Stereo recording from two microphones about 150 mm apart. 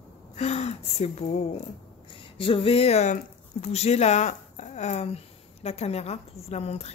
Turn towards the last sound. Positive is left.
turn(degrees=45)  # may be behind; listen again after turning